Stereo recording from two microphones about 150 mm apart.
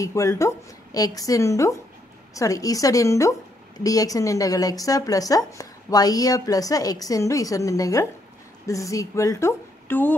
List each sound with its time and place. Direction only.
0.0 s a woman's voice: 20° left (ahead or behind)